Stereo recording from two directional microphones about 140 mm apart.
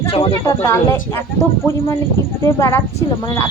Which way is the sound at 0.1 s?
40° left (ahead or behind).